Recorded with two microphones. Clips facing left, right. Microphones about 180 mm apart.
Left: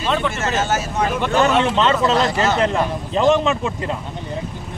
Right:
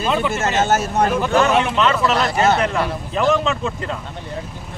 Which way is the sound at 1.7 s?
30° left (ahead or behind).